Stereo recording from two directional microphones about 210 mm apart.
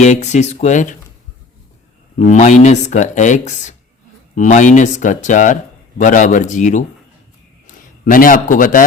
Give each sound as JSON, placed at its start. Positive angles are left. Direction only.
{"t": 0.0, "sound": "speech", "side_deg": 35}
{"t": 2.1, "sound": "speech", "side_deg": 35}
{"t": 8.0, "sound": "speech", "side_deg": 40}